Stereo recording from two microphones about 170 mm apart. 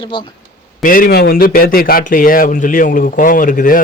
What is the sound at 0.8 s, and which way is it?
Speech, 55° left (ahead or behind).